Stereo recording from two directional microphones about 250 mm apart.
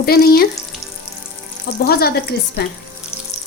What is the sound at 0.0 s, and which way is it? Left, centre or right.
Speech, left.